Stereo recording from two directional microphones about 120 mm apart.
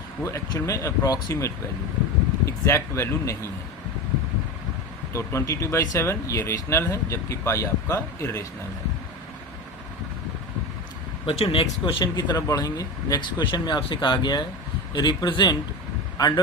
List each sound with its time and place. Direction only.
0.2 s speech: 25° left (ahead or behind)
5.1 s speech: 25° left (ahead or behind)
11.3 s speech: 50° left (ahead or behind)
12.1 s speech: 30° left (ahead or behind)